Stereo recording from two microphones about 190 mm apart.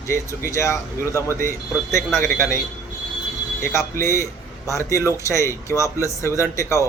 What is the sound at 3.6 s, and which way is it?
Speech, 15° left (ahead or behind).